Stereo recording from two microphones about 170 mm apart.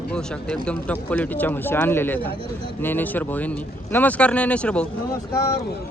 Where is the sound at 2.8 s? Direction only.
10° left (ahead or behind).